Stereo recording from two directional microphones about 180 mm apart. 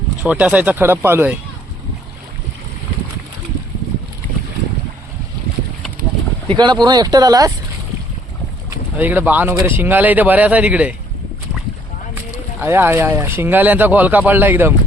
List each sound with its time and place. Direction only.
0.2 s speech: 5° right (ahead or behind)
6.5 s speech: 25° right (ahead or behind)
8.7 s speech: 10° right (ahead or behind)
12.5 s speech: 10° right (ahead or behind)